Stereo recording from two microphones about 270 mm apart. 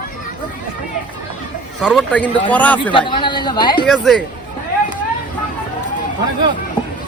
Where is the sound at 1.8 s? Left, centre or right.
Centre.